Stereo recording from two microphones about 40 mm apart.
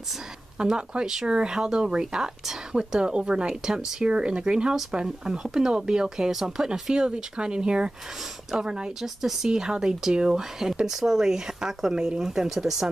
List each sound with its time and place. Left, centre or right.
0.6 s speech: right
6.6 s speech: centre
9.0 s speech: centre